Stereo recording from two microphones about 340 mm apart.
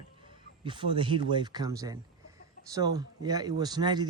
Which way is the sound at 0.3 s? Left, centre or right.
Centre.